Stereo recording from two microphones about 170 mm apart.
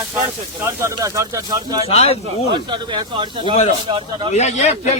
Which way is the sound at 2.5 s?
25° right (ahead or behind).